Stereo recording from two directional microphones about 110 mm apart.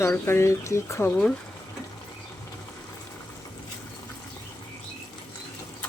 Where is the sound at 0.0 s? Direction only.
25° left (ahead or behind).